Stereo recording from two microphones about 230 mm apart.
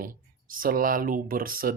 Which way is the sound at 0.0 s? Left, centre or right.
Right.